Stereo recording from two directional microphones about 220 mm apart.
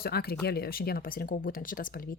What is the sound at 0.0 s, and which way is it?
Speech, 45° left (ahead or behind).